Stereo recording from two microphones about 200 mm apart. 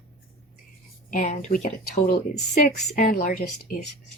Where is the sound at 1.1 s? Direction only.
35° left (ahead or behind).